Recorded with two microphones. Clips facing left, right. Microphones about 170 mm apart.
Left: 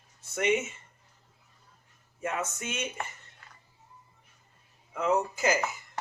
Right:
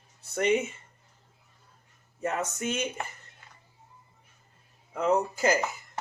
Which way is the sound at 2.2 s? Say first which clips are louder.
Right 3 dB; 35° right (ahead or behind).